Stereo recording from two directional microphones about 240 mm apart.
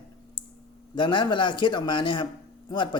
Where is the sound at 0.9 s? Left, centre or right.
Centre.